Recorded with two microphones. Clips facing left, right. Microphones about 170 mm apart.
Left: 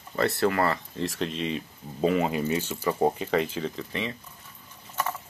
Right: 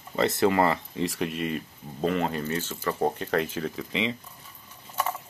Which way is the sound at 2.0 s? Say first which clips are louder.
Left 2 dB; 5° left (ahead or behind).